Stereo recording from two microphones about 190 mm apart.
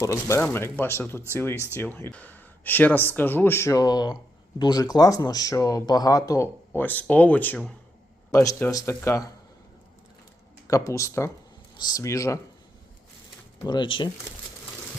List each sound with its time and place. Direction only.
0.0 s speech: 15° left (ahead or behind)
10.7 s speech: 15° left (ahead or behind)
13.7 s speech: 25° left (ahead or behind)